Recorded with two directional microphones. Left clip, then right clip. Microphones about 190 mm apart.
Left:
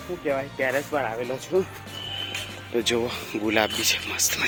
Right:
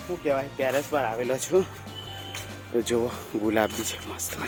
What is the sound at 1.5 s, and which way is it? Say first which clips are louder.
Speech: even; 15° right (ahead or behind).